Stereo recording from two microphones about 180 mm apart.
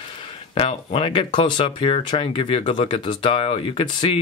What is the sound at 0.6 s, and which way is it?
Speech, 35° left (ahead or behind).